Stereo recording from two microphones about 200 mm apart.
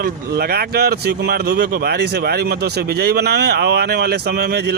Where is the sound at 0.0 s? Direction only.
50° right (ahead or behind).